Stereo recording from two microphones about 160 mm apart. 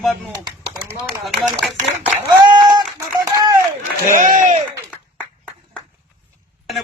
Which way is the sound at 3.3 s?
20° right (ahead or behind).